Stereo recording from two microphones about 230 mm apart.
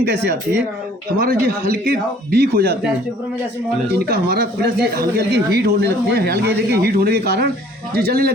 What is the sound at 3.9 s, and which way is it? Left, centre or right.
Speech, right.